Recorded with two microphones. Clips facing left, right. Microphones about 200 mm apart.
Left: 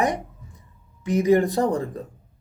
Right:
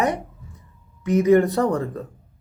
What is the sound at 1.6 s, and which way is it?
Speech, 15° left (ahead or behind).